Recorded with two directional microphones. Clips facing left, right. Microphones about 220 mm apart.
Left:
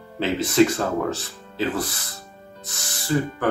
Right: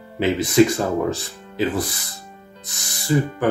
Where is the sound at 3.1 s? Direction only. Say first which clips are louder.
Right 3 dB; 10° right (ahead or behind).